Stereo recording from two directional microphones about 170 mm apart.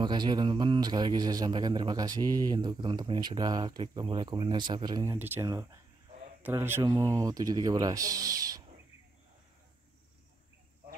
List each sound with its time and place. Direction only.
0.0 s a man's voice: 25° right (ahead or behind)